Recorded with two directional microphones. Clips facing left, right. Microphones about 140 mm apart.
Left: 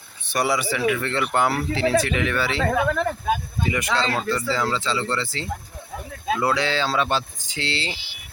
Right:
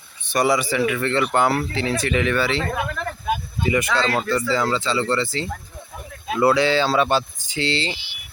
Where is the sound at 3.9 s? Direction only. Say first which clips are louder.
Right 2 dB; 25° left (ahead or behind).